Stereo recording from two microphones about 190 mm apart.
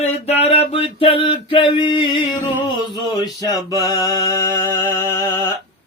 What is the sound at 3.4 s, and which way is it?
Mantra, 20° left (ahead or behind).